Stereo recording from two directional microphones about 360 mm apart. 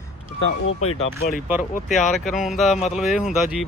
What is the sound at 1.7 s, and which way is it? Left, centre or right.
Speech, centre.